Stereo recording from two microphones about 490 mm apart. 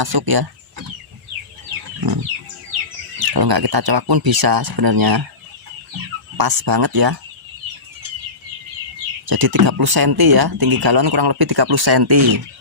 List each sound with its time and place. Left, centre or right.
0.0 s speech: right
3.2 s speech: right
6.3 s speech: right
9.2 s speech: right